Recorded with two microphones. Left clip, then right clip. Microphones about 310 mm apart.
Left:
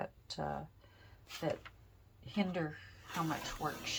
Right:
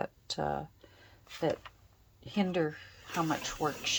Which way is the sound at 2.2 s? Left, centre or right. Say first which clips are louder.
Right 7 dB; right.